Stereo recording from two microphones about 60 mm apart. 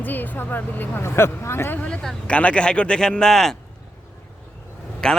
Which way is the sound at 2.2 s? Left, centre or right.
Left.